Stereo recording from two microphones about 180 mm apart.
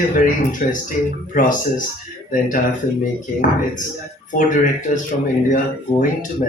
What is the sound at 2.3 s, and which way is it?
A woman's voice, 45° left (ahead or behind).